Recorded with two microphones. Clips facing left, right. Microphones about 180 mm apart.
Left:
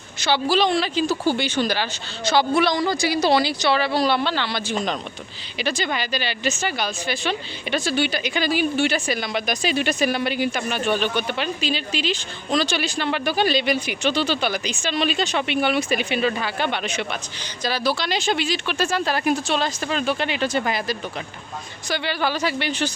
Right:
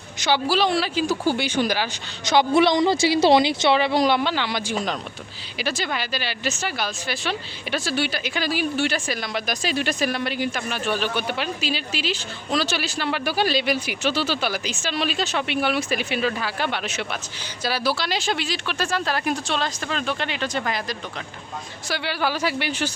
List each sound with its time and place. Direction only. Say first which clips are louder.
0.2 s speech: left 1 dB; 10° right (ahead or behind); by 20.9 s 5° left (ahead or behind)
21.8 s speech: left 1 dB; 5° right (ahead or behind)